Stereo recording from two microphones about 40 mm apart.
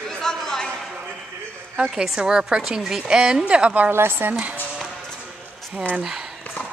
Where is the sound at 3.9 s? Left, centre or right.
Right.